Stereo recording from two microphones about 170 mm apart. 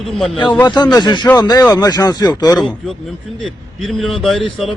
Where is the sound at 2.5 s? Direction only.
Centre (ahead or behind).